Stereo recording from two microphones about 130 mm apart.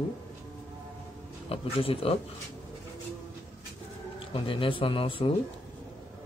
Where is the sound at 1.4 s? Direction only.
45° left (ahead or behind).